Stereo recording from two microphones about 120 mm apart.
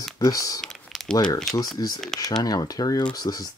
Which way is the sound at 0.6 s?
5° left (ahead or behind).